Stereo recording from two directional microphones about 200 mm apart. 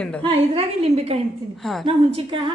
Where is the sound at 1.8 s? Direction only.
25° right (ahead or behind).